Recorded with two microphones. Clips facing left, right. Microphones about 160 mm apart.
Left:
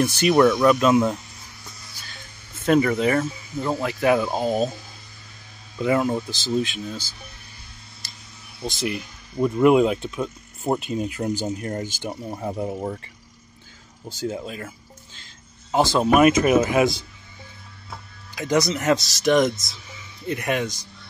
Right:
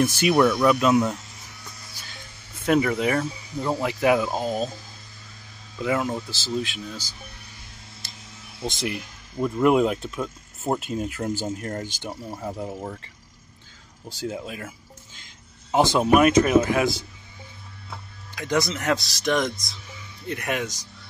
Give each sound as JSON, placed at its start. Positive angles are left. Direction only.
{"t": 0.2, "sound": "speech", "side_deg": -5}
{"t": 2.6, "sound": "speech", "side_deg": -5}
{"t": 4.2, "sound": "speech", "side_deg": 5}
{"t": 5.8, "sound": "speech", "side_deg": 0}
{"t": 9.4, "sound": "speech", "side_deg": 5}
{"t": 12.2, "sound": "speech", "side_deg": 15}
{"t": 14.0, "sound": "speech", "side_deg": 0}
{"t": 15.7, "sound": "speech", "side_deg": -20}
{"t": 16.2, "sound": "speech", "side_deg": 5}